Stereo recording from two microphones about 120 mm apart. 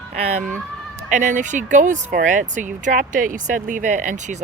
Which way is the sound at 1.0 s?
90° right.